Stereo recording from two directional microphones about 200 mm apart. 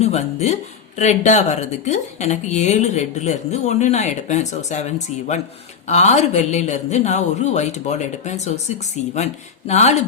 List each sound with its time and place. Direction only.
0.0 s speech: 35° left (ahead or behind)